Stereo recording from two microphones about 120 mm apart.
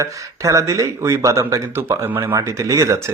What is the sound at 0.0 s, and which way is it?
Speech, 25° right (ahead or behind).